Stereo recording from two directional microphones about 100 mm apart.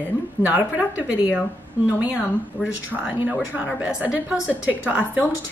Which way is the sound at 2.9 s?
15° right (ahead or behind).